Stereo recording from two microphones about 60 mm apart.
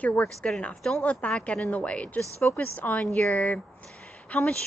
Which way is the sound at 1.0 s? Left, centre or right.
Centre.